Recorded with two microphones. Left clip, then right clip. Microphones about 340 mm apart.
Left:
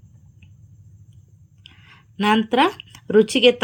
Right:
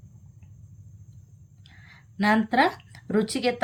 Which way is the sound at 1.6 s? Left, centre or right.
Centre.